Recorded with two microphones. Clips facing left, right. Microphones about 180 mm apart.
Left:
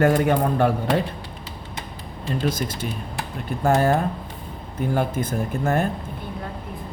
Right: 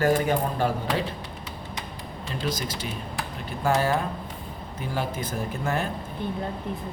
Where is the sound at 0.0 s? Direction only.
60° left (ahead or behind).